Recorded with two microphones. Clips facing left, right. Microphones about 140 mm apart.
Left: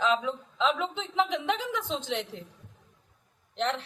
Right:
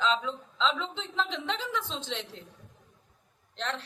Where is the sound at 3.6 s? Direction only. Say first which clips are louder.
Left 5 dB; 20° left (ahead or behind).